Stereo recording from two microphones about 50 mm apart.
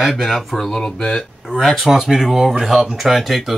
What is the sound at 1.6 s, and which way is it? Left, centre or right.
Speech, centre.